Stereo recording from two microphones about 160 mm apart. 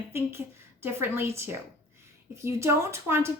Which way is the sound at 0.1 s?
15° right (ahead or behind).